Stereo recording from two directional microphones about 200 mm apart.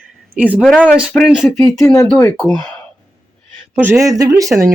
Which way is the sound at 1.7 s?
15° left (ahead or behind).